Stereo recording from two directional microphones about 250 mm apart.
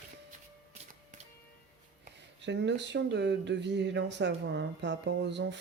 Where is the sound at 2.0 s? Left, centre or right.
Right.